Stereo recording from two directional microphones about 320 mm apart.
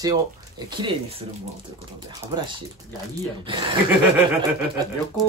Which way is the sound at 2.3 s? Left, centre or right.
Centre.